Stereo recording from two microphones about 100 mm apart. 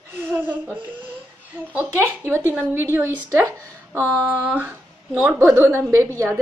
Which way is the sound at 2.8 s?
25° right (ahead or behind).